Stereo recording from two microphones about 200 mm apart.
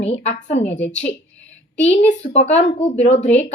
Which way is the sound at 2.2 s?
35° left (ahead or behind).